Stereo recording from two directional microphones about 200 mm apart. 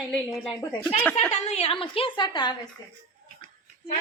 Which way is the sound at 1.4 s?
30° left (ahead or behind).